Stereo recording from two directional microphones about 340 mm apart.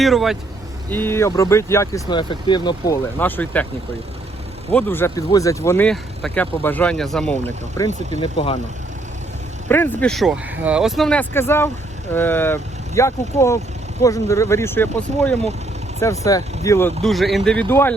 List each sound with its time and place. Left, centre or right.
0.0 s speech: centre
4.7 s speech: centre
8.2 s speech: centre
9.6 s speech: centre